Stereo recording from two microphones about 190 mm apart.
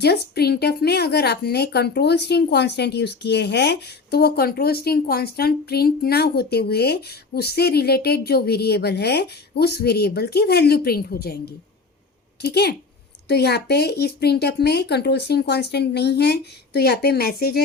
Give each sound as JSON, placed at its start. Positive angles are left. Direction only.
{"t": 0.0, "sound": "speech", "side_deg": 60}